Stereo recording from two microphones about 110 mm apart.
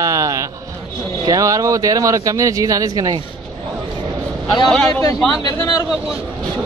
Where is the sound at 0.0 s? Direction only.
30° right (ahead or behind).